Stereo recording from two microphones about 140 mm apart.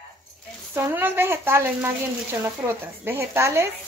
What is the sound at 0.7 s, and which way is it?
Speech, 15° right (ahead or behind).